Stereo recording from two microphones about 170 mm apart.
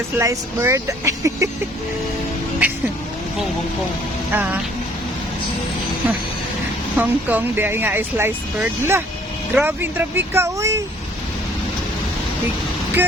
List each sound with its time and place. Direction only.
0.2 s speech: 15° right (ahead or behind)
2.6 s speech: 10° right (ahead or behind)
4.3 s speech: 10° right (ahead or behind)
6.9 s speech: 10° right (ahead or behind)